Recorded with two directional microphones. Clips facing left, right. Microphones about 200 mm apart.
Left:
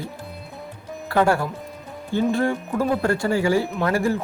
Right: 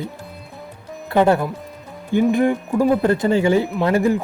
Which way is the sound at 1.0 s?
20° right (ahead or behind).